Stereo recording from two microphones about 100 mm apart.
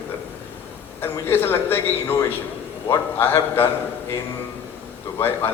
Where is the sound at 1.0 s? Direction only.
20° left (ahead or behind).